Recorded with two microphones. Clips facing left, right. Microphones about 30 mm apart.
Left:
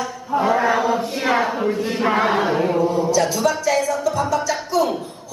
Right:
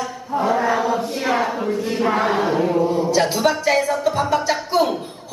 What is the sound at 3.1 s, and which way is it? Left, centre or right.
Music, right.